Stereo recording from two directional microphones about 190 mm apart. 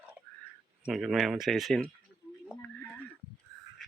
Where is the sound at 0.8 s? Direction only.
Centre (ahead or behind).